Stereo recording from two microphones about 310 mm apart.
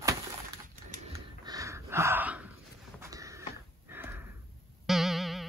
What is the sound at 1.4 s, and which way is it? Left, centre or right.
Gasp, centre.